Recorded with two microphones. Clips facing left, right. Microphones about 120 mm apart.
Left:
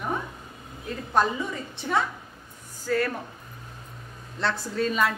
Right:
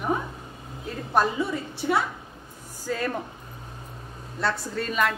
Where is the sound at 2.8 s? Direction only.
15° right (ahead or behind).